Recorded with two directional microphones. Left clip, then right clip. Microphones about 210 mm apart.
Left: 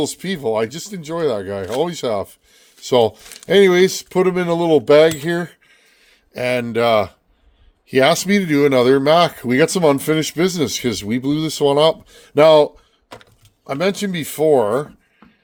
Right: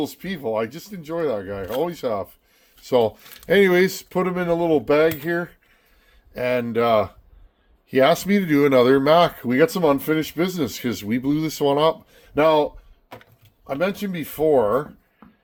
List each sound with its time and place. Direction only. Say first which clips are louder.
0.0 s speech: left 6 dB; 50° left (ahead or behind)
3.3 s speech: left 4 dB; 25° left (ahead or behind); by 5.5 s 45° left (ahead or behind)
6.1 s speech: left 3 dB; 30° left (ahead or behind)